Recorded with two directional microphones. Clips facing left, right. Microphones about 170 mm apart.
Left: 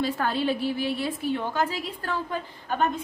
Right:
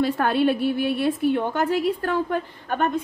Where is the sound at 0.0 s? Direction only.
60° right (ahead or behind).